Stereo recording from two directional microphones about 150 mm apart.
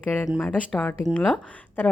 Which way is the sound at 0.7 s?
15° left (ahead or behind).